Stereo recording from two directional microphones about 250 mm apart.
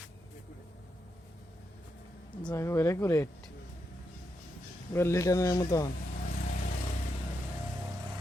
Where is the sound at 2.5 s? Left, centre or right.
Centre.